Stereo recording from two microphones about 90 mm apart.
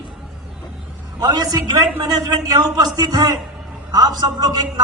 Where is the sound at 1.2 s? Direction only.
45° right (ahead or behind).